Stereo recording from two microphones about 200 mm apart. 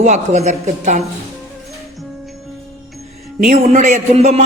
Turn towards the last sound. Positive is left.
turn(degrees=-35)  # may be behind; listen again after turning